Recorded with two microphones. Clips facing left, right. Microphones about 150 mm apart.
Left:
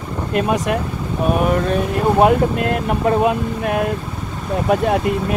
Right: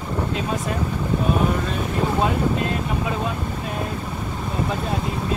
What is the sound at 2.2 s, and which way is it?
Speech, 60° left (ahead or behind).